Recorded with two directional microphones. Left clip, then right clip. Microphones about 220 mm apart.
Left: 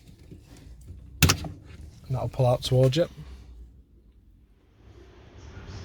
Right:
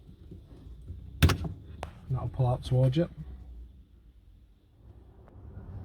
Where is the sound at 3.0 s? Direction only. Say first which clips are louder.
Left 6 dB; 50° left (ahead or behind).